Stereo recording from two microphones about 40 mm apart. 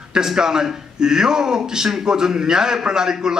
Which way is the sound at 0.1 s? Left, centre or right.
Centre.